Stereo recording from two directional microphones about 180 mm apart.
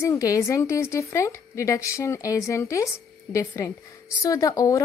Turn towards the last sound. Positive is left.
turn(degrees=20)  # may be behind; listen again after turning